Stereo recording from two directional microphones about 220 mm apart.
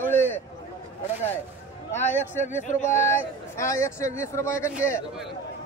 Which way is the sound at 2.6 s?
35° left (ahead or behind).